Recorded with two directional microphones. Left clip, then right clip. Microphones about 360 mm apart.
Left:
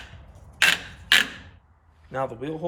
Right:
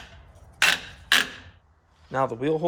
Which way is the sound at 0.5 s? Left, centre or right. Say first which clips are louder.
Left 1 dB; centre.